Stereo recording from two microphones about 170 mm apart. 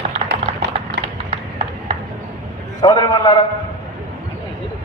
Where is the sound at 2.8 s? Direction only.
25° left (ahead or behind).